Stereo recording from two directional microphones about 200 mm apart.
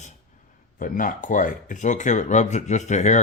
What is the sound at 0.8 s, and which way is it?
Speech, 40° left (ahead or behind).